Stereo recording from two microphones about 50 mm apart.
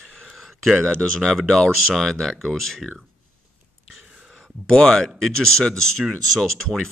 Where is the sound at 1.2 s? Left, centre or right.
Centre.